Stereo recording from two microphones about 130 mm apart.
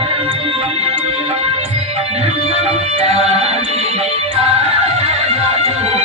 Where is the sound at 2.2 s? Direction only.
55° right (ahead or behind).